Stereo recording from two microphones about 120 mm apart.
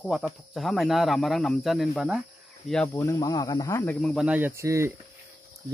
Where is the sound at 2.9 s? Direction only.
25° left (ahead or behind).